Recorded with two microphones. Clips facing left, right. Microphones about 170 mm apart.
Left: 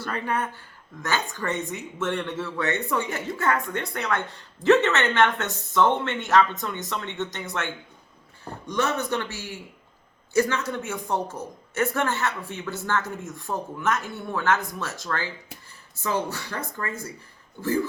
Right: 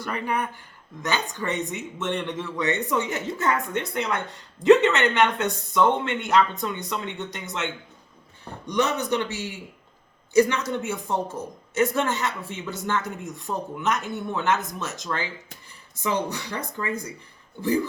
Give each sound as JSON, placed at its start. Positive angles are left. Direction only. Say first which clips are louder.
{"t": 0.0, "sound": "a woman's voice", "louder": "even", "side_deg": -15}